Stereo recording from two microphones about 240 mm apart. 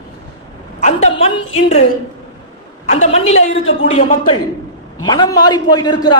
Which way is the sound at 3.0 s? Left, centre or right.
Left.